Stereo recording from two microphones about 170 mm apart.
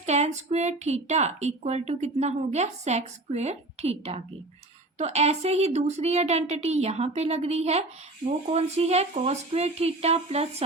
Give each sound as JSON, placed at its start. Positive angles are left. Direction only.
{"t": 0.0, "sound": "a woman's voice", "side_deg": -40}